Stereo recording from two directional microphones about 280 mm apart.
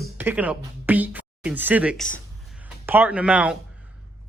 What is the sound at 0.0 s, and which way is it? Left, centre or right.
Speech, centre.